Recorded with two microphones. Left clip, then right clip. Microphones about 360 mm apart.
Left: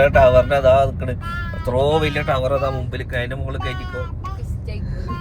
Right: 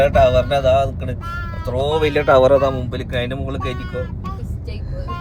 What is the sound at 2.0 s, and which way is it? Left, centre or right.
Speech, centre.